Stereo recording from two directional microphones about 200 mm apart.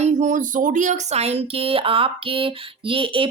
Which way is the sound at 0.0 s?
35° right (ahead or behind).